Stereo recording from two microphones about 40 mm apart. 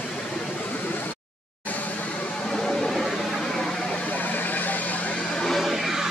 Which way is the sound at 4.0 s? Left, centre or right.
Left.